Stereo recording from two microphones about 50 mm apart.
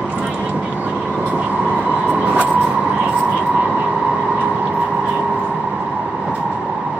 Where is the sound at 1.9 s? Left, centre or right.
Right.